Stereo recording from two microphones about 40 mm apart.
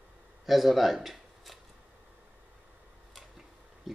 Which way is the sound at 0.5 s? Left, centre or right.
Centre.